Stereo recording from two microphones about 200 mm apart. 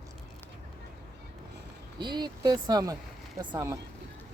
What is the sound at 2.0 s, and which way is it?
Speech, 20° right (ahead or behind).